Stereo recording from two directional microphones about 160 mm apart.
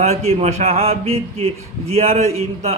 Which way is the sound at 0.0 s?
40° right (ahead or behind).